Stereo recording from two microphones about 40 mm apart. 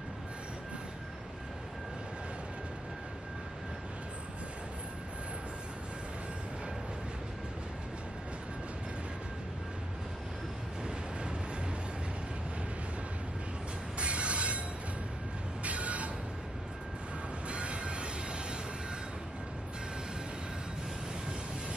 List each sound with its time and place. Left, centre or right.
13.9 s train: right
15.6 s train: right
17.5 s train: right